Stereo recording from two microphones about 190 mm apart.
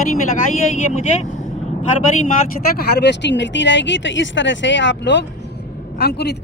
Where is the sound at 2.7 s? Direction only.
60° left (ahead or behind).